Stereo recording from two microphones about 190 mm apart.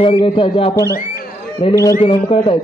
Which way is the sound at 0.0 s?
25° left (ahead or behind).